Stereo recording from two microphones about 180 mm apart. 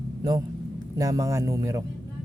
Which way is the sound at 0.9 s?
20° right (ahead or behind).